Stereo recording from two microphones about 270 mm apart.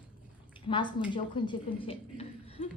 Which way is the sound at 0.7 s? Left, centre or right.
Centre.